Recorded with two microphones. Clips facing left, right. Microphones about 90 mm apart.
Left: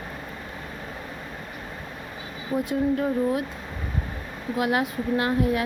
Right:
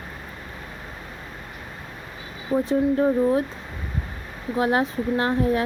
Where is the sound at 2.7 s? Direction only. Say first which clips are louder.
Right 4 dB; 30° right (ahead or behind).